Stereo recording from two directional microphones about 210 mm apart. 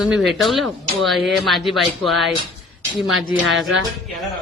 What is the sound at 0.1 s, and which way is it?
Speech, centre (ahead or behind).